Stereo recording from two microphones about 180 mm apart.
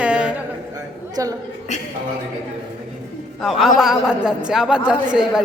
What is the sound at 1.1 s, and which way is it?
Speech, 20° right (ahead or behind).